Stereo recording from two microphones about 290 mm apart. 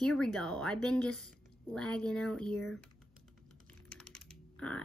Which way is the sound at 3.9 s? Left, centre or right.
Centre.